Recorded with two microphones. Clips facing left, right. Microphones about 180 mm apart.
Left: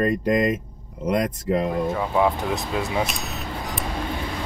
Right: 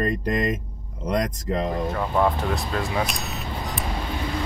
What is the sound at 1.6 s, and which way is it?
Speech, 5° left (ahead or behind).